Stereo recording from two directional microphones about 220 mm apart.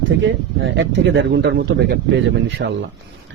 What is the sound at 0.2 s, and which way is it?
Speech, 55° right (ahead or behind).